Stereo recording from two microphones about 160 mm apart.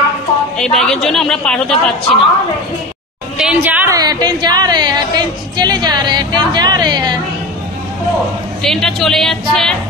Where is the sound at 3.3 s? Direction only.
5° right (ahead or behind).